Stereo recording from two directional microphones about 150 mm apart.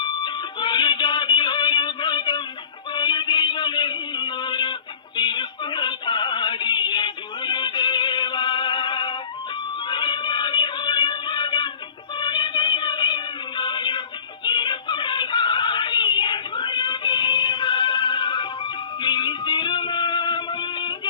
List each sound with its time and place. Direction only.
0.0 s music: 30° left (ahead or behind)
2.9 s a sound: 30° left (ahead or behind)
9.9 s music: 30° left (ahead or behind)